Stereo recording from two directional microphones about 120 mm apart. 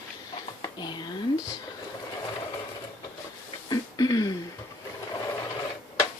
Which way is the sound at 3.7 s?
35° left (ahead or behind).